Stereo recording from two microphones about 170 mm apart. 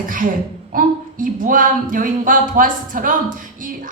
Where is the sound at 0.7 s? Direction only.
55° right (ahead or behind).